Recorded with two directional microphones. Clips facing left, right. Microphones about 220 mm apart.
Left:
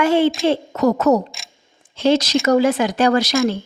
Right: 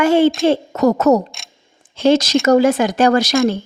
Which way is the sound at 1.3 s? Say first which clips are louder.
Even; centre (ahead or behind).